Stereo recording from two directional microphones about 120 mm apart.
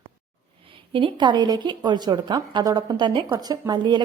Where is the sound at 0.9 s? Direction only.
40° right (ahead or behind).